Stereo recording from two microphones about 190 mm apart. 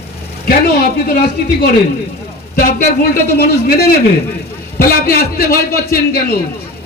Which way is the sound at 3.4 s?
55° left (ahead or behind).